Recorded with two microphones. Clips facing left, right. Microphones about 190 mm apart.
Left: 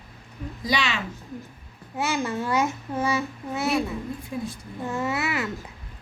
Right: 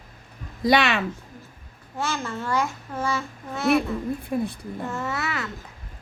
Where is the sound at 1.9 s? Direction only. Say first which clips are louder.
Left 3 dB; 15° left (ahead or behind).